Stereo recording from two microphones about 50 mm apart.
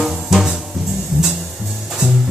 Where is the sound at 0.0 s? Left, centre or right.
Centre.